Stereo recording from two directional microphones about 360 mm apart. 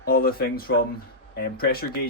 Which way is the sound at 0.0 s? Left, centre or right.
Left.